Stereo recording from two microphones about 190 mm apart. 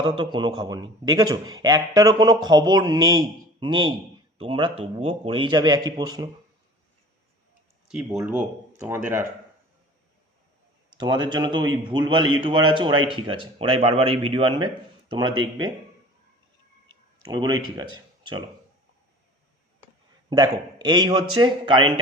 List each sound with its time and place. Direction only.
0.0 s a man's voice: 25° right (ahead or behind)
7.9 s speech: 5° right (ahead or behind)
10.9 s a man's voice: 25° right (ahead or behind)
17.2 s a man's voice: 20° right (ahead or behind)
20.3 s a man's voice: 20° right (ahead or behind)